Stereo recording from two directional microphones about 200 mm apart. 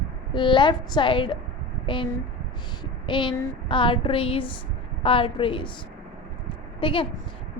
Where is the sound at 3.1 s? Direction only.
25° left (ahead or behind).